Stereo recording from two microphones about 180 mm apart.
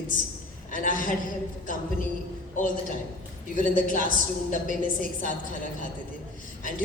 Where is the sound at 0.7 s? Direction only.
50° left (ahead or behind).